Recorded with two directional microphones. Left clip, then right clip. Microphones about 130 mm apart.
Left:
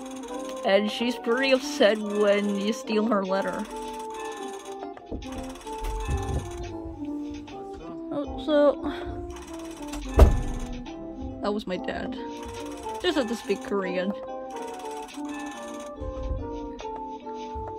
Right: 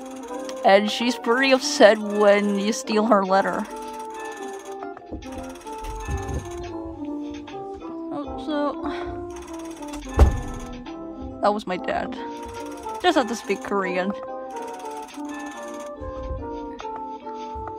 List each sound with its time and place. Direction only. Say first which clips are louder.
0.7 s speech: right 6 dB; 40° right (ahead or behind)
8.1 s music: left 4 dB; centre (ahead or behind)
11.4 s speech: right 7 dB; 25° right (ahead or behind)